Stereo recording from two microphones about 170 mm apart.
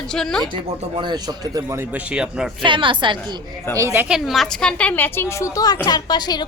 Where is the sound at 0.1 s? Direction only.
5° left (ahead or behind).